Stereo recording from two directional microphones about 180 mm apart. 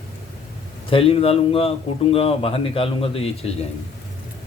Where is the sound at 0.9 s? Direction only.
35° left (ahead or behind).